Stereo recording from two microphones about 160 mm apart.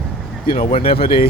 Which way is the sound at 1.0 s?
70° left (ahead or behind).